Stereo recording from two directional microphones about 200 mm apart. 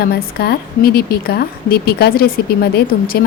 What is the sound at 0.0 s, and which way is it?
A woman's voice, 50° left (ahead or behind).